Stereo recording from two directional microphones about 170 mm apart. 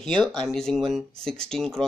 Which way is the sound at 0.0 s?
5° left (ahead or behind).